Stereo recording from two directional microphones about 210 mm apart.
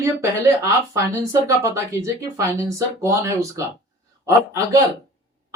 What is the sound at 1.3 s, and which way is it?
Speech, 15° right (ahead or behind).